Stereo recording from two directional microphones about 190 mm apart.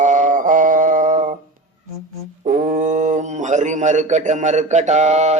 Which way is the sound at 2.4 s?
45° right (ahead or behind).